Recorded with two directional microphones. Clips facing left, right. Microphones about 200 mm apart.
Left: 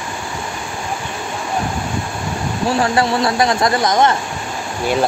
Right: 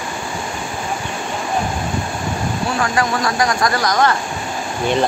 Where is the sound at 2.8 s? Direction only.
30° left (ahead or behind).